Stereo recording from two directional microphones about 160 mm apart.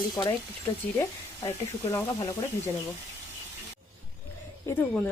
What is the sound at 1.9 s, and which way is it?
Speech, 20° left (ahead or behind).